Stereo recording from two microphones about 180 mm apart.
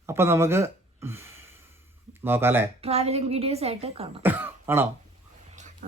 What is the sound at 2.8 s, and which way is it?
A woman's voice, 35° right (ahead or behind).